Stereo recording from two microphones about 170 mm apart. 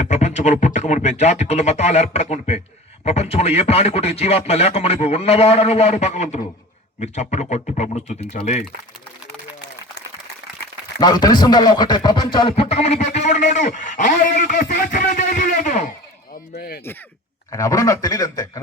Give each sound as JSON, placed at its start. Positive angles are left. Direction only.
{"t": 0.0, "sound": "speech", "side_deg": 40}
{"t": 11.0, "sound": "speech", "side_deg": 25}
{"t": 16.3, "sound": "fowl", "side_deg": 65}
{"t": 17.5, "sound": "a man's voice", "side_deg": 20}